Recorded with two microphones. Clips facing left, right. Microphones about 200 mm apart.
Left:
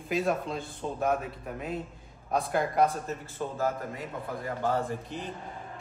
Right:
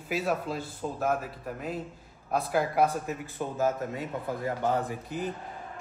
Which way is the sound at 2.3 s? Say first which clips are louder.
Even; 5° right (ahead or behind).